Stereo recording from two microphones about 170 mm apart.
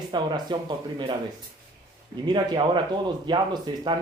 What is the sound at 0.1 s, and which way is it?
Speech, 25° right (ahead or behind).